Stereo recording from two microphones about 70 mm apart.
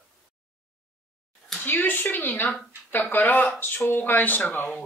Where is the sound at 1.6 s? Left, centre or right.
Left.